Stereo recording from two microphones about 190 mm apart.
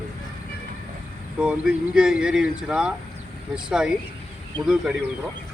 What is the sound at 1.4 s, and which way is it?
Speech, 5° right (ahead or behind).